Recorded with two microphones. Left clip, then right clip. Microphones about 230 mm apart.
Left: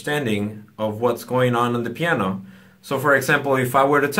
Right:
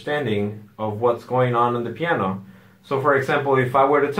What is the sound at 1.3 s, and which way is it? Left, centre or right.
Speech, left.